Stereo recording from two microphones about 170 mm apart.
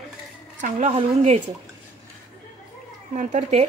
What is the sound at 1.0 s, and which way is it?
Cutlery, 40° right (ahead or behind).